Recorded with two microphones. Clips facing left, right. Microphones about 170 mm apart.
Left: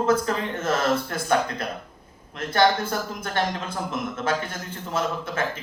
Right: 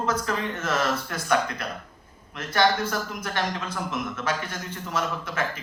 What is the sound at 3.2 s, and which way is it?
A man's voice, 30° left (ahead or behind).